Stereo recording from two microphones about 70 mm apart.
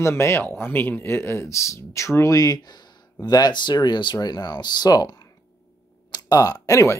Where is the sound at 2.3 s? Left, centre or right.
Left.